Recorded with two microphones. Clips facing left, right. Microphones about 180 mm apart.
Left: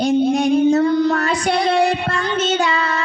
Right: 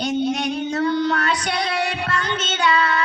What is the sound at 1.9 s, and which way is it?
Child singing, 40° left (ahead or behind).